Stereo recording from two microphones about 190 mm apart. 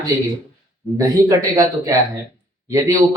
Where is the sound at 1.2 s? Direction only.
20° right (ahead or behind).